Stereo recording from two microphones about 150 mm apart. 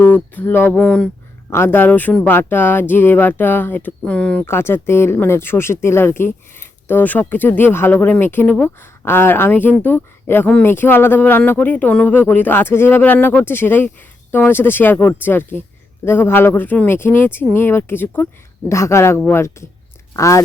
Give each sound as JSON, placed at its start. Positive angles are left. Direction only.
{"t": 0.0, "sound": "speech", "side_deg": 15}